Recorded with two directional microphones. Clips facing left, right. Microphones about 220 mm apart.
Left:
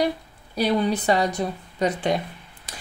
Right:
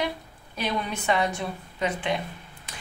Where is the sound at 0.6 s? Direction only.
35° left (ahead or behind).